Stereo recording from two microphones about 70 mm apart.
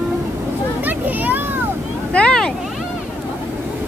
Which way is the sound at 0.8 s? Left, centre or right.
Right.